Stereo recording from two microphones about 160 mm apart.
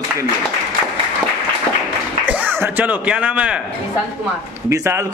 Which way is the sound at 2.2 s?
10° right (ahead or behind).